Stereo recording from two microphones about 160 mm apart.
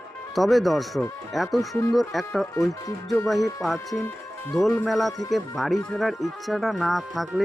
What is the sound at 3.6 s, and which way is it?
Speech, centre (ahead or behind).